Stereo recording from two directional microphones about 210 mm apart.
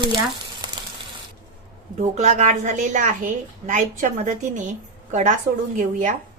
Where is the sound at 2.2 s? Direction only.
35° right (ahead or behind).